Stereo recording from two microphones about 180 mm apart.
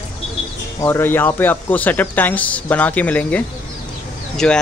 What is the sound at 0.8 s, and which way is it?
Speech, 15° left (ahead or behind).